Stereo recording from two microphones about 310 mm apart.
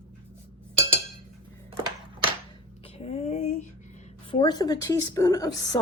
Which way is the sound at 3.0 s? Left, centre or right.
Left.